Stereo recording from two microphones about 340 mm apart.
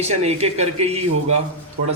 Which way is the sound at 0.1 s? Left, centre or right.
Centre.